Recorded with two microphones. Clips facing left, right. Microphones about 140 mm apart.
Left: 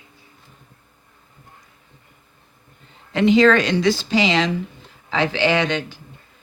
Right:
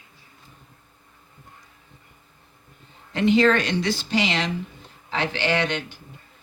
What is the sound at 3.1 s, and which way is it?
Speech, 90° left.